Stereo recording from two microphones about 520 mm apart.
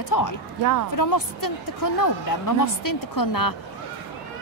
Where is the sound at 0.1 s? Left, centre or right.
Left.